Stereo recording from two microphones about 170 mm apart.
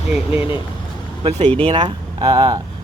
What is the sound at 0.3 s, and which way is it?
Speech, 30° left (ahead or behind).